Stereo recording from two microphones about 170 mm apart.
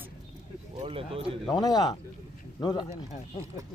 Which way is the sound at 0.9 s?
30° right (ahead or behind).